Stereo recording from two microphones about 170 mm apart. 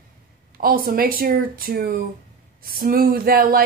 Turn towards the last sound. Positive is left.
turn(degrees=-60)  # may be behind; listen again after turning